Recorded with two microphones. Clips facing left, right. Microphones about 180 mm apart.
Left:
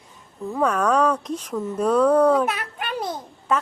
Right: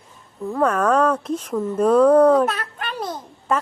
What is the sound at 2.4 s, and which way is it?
Speech, 10° left (ahead or behind).